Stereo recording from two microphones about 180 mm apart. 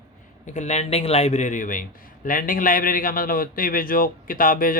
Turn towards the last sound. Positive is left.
turn(degrees=50)  # may be behind; listen again after turning